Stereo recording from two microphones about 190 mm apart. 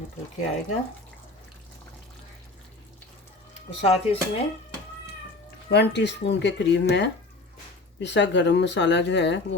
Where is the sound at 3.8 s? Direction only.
30° left (ahead or behind).